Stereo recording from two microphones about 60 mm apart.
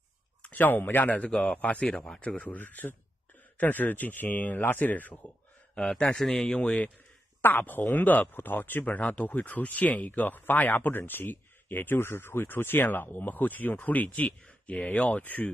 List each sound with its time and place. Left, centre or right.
0.4 s speech: left
1.3 s a man's voice: centre
5.8 s a man's voice: centre
7.4 s speech: left